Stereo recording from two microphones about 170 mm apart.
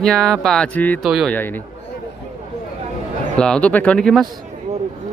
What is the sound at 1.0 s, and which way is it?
Speech, centre (ahead or behind).